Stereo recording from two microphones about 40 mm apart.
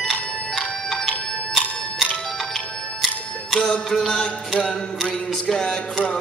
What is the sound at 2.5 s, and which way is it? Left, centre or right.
Music, centre.